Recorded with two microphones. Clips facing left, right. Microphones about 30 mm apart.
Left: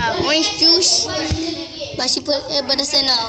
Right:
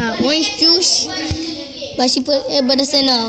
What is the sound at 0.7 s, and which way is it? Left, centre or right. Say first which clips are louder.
Speech: right 1 dB; right.